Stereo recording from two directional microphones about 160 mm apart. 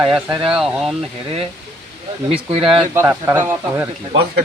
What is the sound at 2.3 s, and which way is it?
Speech, 35° right (ahead or behind).